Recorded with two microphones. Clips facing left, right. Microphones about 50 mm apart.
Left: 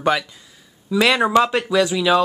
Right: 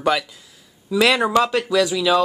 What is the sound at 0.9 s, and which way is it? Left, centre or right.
Speech, centre.